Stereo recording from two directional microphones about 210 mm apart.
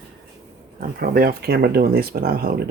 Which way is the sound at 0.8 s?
45° right (ahead or behind).